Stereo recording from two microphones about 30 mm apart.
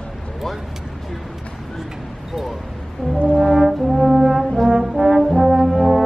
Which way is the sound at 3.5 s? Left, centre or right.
Centre.